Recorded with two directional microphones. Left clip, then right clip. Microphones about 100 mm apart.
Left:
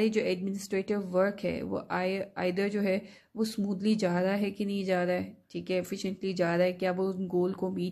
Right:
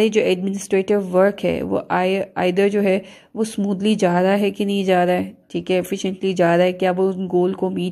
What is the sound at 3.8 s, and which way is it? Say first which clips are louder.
A woman's voice: right 12 dB; 35° right (ahead or behind).